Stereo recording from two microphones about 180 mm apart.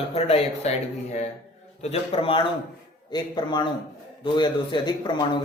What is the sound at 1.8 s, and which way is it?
A man's voice, 35° left (ahead or behind).